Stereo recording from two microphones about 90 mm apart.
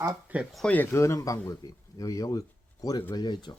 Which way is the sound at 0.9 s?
30° left (ahead or behind).